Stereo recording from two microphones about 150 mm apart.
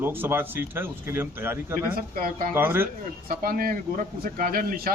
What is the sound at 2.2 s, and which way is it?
Speech, 70° right (ahead or behind).